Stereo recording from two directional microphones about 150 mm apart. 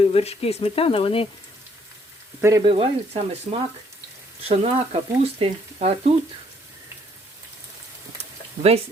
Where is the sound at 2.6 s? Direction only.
40° right (ahead or behind).